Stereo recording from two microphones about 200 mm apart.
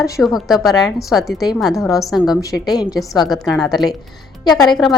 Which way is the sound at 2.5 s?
20° left (ahead or behind).